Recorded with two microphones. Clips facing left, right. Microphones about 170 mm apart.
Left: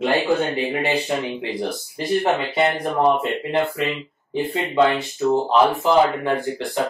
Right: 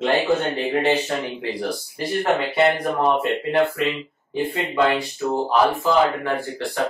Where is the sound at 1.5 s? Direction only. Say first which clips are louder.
Left 1 dB; 20° left (ahead or behind).